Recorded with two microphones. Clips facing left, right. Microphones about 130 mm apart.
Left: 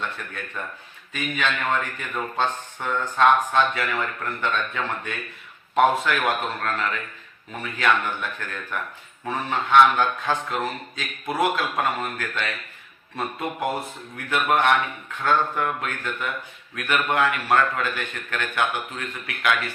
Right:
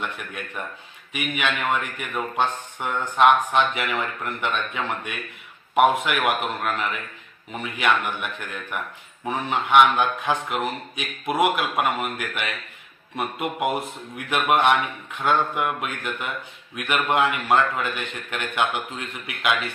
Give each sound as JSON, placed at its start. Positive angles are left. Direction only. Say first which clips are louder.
{"t": 0.0, "sound": "a man's voice", "louder": "right 1 dB", "side_deg": -15}